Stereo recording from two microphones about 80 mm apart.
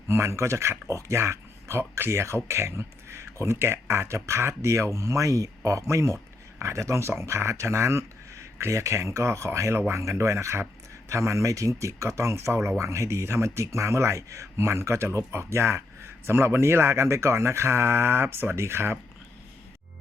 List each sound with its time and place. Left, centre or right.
0.1 s speech: right